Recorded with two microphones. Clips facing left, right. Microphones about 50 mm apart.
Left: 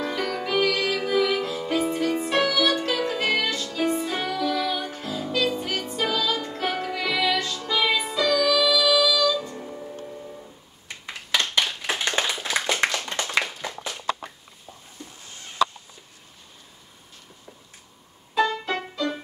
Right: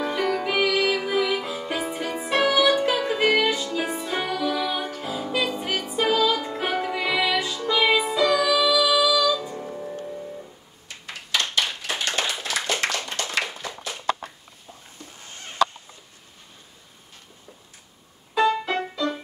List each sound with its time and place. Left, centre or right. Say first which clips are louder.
0.0 s music: right 3 dB; centre
11.3 s clapping: left 1 dB; left
15.2 s a sound: right 2 dB; right
18.3 s music: right 2 dB; centre